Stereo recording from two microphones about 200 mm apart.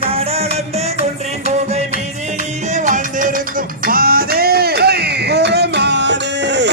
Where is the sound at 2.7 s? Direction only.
40° right (ahead or behind).